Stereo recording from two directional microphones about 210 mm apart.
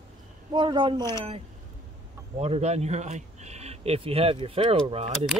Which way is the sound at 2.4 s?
30° right (ahead or behind).